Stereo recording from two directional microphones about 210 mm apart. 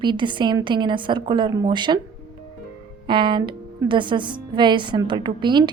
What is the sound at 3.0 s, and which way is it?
A woman's voice, 20° right (ahead or behind).